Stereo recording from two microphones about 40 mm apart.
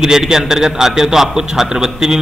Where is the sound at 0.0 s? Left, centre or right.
Centre.